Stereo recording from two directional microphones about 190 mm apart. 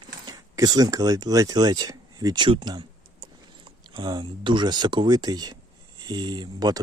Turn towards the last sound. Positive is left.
turn(degrees=-20)  # may be behind; listen again after turning